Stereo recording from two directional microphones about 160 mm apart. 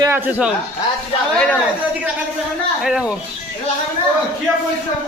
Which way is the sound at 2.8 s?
5° right (ahead or behind).